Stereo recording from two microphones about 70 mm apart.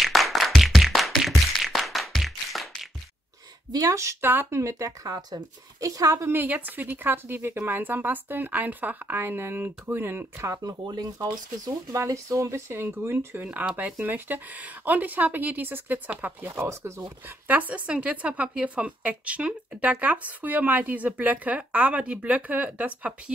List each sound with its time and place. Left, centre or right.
0.0 s music: centre
3.8 s a woman's voice: right
4.2 s speech: right
4.6 s a woman's voice: right
6.3 s speech: right
10.6 s speech: right
11.6 s speech: right
13.4 s speech: right
16.4 s speech: right
17.0 s speech: right